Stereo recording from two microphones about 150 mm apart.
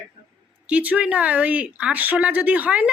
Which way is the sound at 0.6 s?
10° right (ahead or behind).